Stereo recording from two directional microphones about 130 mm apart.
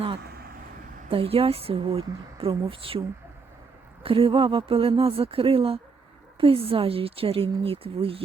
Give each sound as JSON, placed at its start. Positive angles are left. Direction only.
{"t": 1.1, "sound": "speech", "side_deg": -45}
{"t": 4.0, "sound": "speech", "side_deg": -45}